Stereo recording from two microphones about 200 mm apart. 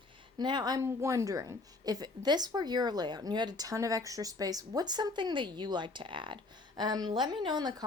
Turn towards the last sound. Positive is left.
turn(degrees=-20)  # may be behind; listen again after turning